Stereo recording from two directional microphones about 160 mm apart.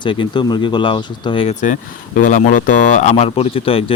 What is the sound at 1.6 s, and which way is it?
Speech, 55° left (ahead or behind).